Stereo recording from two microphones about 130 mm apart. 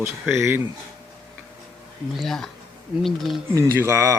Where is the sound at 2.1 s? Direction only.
Centre (ahead or behind).